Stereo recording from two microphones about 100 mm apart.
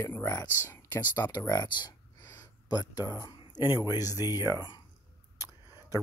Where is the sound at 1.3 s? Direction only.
40° left (ahead or behind).